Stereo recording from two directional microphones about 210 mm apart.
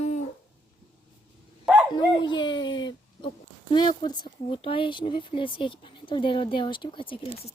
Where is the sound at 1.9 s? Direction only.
20° left (ahead or behind).